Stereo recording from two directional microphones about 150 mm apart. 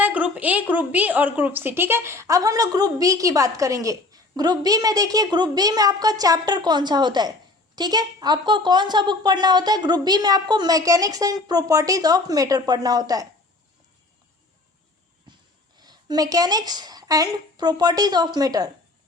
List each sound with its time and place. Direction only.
0.0 s a woman's voice: 10° right (ahead or behind)
15.8 s a woman's voice: 25° right (ahead or behind)